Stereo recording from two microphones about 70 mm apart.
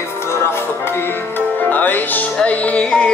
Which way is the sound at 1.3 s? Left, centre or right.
Left.